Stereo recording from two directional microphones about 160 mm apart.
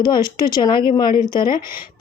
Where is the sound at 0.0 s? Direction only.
25° left (ahead or behind).